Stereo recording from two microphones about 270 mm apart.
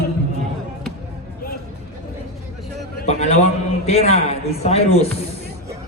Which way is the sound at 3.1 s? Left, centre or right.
Left.